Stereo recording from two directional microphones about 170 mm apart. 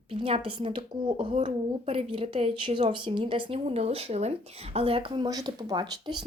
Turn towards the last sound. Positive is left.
turn(degrees=-25)  # may be behind; listen again after turning